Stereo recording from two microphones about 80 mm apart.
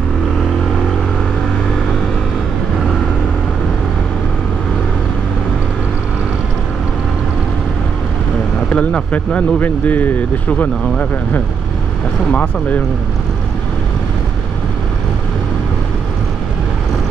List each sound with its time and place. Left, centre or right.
8.6 s speech: centre